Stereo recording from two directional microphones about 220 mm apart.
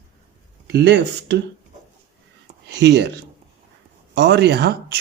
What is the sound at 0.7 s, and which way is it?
Speech, 50° right (ahead or behind).